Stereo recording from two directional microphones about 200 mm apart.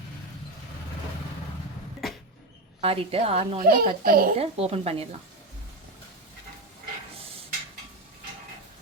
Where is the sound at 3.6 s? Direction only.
45° right (ahead or behind).